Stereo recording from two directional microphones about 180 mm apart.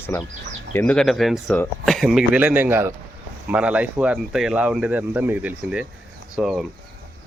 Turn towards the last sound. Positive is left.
turn(degrees=-5)  # may be behind; listen again after turning